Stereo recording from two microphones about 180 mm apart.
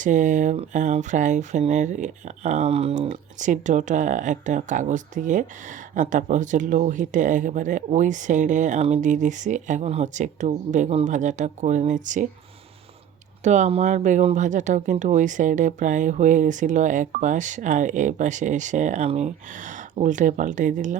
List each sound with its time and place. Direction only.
0.0 s speech: 45° right (ahead or behind)
13.4 s speech: 40° right (ahead or behind)